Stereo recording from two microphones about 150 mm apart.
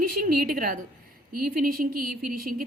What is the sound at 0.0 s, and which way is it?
A woman's voice, 70° right (ahead or behind).